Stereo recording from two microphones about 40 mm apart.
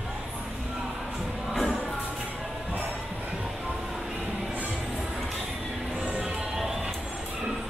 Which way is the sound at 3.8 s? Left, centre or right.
Centre.